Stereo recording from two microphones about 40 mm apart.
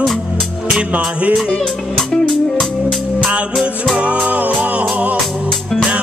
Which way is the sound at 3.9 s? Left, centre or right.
Right.